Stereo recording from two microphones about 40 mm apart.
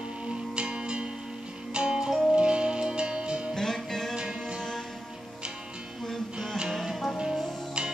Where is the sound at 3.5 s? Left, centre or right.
Centre.